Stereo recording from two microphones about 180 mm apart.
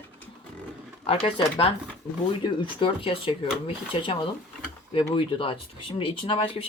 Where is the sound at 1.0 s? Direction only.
30° left (ahead or behind).